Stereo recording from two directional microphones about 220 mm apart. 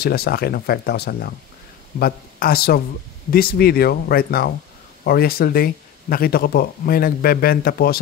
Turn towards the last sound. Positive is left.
turn(degrees=40)  # may be behind; listen again after turning